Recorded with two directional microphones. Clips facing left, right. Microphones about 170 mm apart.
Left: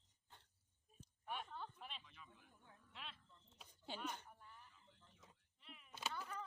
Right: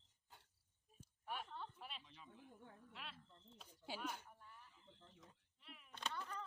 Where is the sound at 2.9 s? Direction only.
5° right (ahead or behind).